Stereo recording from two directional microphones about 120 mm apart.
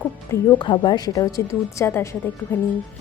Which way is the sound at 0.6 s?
40° left (ahead or behind).